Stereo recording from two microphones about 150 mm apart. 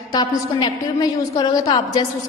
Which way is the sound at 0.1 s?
25° left (ahead or behind).